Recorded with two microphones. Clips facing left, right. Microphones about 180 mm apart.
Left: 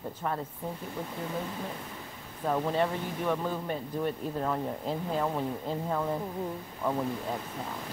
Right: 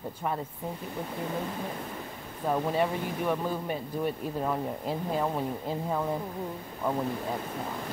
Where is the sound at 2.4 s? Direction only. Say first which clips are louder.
Right 1 dB; 10° right (ahead or behind).